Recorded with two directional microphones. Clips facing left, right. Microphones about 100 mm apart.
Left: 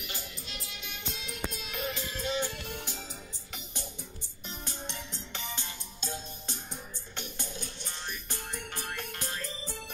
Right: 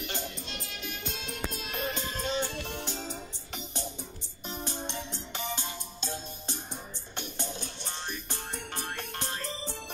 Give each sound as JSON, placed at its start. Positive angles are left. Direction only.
{"t": 0.0, "sound": "music", "side_deg": -35}